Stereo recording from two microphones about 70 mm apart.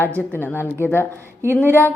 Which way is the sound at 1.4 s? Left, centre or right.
Right.